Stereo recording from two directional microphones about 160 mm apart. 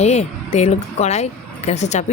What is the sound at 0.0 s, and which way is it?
Speech, 45° left (ahead or behind).